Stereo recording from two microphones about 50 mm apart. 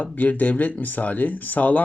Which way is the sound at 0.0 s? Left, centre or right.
Left.